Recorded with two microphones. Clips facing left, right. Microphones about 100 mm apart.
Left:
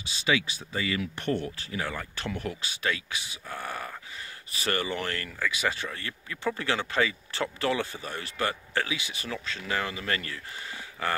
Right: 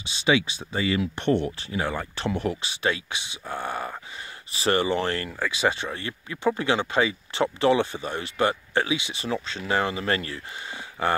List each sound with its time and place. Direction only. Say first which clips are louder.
0.0 s speech: right 5 dB; 25° right (ahead or behind)